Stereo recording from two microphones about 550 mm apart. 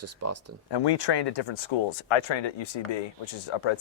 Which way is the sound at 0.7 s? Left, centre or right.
Left.